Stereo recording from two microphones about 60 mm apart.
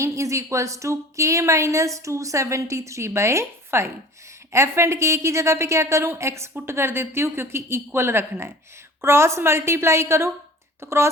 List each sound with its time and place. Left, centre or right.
0.0 s a woman's voice: right